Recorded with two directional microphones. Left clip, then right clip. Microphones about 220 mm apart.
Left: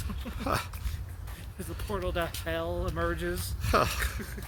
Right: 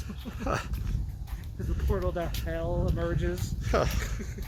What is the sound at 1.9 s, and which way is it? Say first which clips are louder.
Speech: even; 30° left (ahead or behind).